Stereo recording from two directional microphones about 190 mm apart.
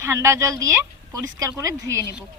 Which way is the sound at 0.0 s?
15° right (ahead or behind).